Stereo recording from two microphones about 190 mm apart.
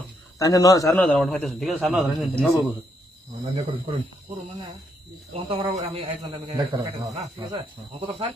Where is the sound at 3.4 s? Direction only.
30° right (ahead or behind).